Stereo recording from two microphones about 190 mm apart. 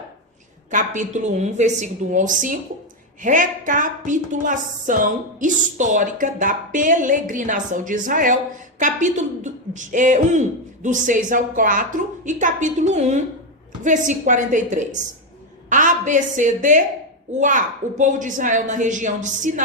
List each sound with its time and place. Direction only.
0.7 s a woman's voice: 40° right (ahead or behind)